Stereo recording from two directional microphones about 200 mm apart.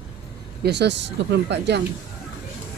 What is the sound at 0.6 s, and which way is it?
Speech, 55° right (ahead or behind).